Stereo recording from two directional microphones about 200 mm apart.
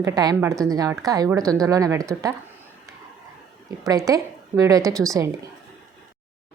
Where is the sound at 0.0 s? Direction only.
20° right (ahead or behind).